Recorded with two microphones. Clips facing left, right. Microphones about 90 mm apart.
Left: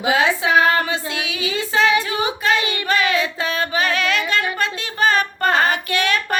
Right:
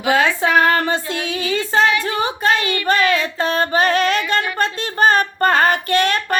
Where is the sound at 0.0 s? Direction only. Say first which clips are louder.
Right 2 dB; 15° left (ahead or behind).